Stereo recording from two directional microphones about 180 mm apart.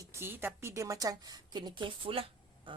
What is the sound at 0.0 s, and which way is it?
A woman's voice, 15° right (ahead or behind).